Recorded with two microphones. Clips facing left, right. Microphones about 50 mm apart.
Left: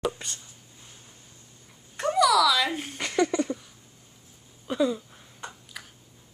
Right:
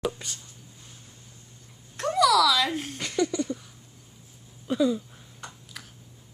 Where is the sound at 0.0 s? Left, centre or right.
Centre.